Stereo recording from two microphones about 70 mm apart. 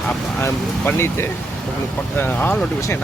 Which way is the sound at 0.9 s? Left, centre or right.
Left.